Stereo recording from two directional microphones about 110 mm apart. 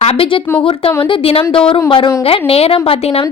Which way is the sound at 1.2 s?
60° left (ahead or behind).